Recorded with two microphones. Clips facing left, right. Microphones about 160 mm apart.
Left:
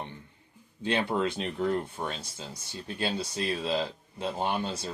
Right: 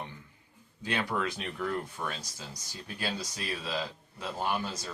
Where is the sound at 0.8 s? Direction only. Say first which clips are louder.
Left 4 dB; 25° left (ahead or behind).